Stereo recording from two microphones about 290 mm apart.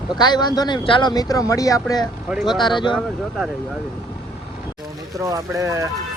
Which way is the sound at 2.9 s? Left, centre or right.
Centre.